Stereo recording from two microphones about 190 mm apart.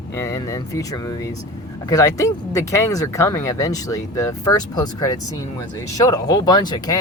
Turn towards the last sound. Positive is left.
turn(degrees=20)  # may be behind; listen again after turning